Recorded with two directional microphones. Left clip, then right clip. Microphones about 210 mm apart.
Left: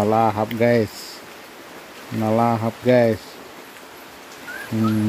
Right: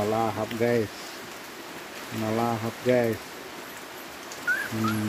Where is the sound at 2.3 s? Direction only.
50° left (ahead or behind).